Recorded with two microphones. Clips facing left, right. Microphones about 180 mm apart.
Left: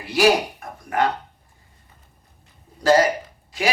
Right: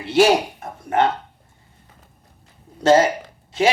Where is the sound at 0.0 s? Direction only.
25° right (ahead or behind).